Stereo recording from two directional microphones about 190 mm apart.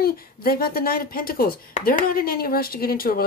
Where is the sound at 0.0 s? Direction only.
50° left (ahead or behind).